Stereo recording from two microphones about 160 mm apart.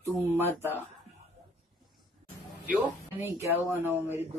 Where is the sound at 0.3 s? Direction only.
15° right (ahead or behind).